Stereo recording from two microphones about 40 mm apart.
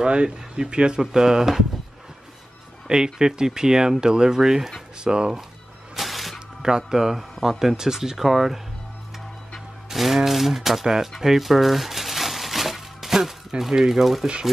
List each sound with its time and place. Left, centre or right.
0.0 s speech: right
2.9 s speech: centre
5.0 s speech: right
5.9 s music: centre
6.9 s speech: centre
9.8 s speech: centre